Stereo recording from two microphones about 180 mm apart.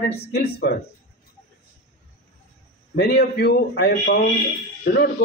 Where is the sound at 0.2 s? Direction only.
65° left (ahead or behind).